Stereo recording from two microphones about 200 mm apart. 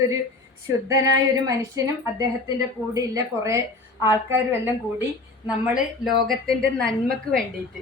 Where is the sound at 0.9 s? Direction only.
15° right (ahead or behind).